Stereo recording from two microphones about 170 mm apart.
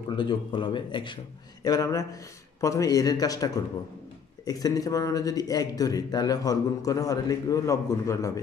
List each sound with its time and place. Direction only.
0.1 s a man's voice: 30° left (ahead or behind)